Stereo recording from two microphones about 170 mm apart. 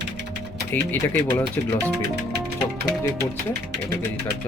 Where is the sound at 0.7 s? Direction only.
15° left (ahead or behind).